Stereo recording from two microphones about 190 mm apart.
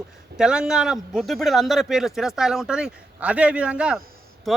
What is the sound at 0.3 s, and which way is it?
A man's voice, 5° right (ahead or behind).